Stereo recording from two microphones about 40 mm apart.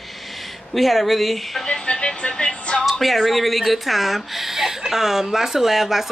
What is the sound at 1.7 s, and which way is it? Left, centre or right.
Music, left.